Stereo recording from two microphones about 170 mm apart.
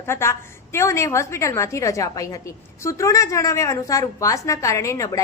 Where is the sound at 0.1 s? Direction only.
15° left (ahead or behind).